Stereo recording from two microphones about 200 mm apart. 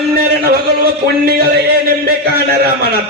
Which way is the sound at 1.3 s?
50° right (ahead or behind).